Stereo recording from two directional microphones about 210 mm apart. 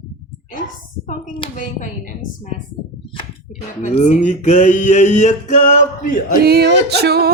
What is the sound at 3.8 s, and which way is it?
Male singing, 35° left (ahead or behind).